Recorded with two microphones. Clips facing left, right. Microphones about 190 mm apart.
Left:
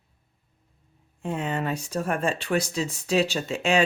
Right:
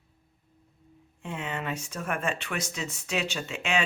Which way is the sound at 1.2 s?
40° left (ahead or behind).